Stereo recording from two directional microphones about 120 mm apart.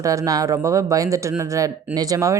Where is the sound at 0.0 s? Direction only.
30° right (ahead or behind).